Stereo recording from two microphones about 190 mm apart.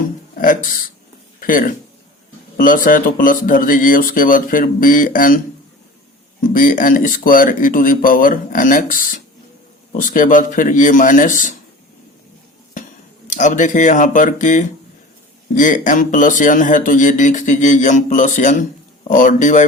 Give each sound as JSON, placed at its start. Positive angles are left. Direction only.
{"t": 0.3, "sound": "speech", "side_deg": 45}
{"t": 6.4, "sound": "speech", "side_deg": 45}
{"t": 13.2, "sound": "speech", "side_deg": 40}